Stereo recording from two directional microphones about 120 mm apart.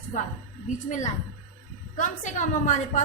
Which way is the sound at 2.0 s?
90° left.